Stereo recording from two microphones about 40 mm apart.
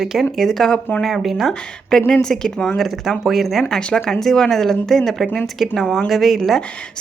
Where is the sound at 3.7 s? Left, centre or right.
Centre.